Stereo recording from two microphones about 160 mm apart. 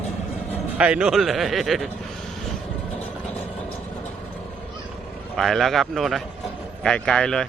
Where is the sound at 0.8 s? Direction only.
5° right (ahead or behind).